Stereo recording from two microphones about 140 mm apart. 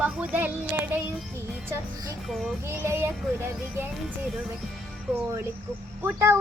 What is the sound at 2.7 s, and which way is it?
Speech, 20° right (ahead or behind).